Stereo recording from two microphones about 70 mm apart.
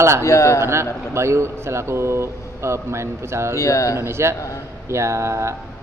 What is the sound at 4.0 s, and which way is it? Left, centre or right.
Speech, right.